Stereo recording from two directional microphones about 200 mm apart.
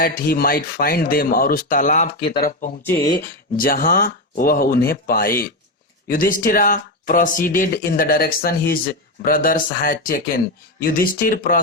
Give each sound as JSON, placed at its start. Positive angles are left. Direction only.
{"t": 0.0, "sound": "speech", "side_deg": 45}
{"t": 2.8, "sound": "speech", "side_deg": 10}
{"t": 3.6, "sound": "speech", "side_deg": 45}